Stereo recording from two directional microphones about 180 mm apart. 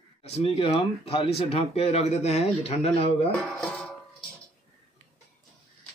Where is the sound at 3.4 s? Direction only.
Centre (ahead or behind).